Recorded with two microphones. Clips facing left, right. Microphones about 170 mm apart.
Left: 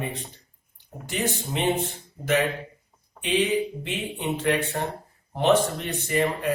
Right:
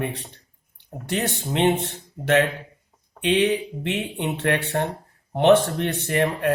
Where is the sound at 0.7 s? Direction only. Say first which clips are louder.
Right 4 dB; 70° right (ahead or behind).